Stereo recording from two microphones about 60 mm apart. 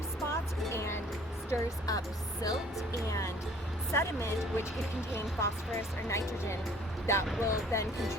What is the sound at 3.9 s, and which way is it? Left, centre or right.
Speech, left.